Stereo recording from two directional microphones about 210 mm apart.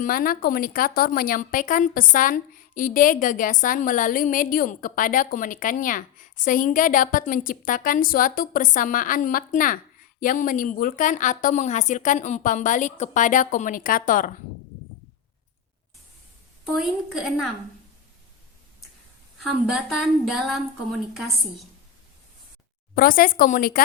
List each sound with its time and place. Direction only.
0.0 s a woman's voice: 40° left (ahead or behind)
16.7 s a woman's voice: centre (ahead or behind)
19.5 s a woman's voice: centre (ahead or behind)
23.0 s speech: 40° left (ahead or behind)